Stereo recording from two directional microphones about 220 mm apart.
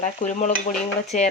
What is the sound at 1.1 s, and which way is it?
Speech, 35° left (ahead or behind).